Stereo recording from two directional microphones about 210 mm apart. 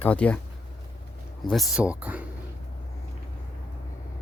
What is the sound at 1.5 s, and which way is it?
Speech, centre (ahead or behind).